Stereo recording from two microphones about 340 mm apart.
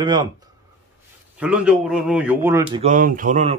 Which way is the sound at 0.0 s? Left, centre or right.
Centre.